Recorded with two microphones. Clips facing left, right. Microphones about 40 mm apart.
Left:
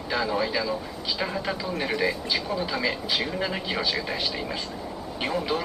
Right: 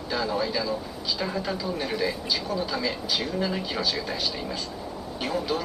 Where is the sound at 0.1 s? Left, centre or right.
Centre.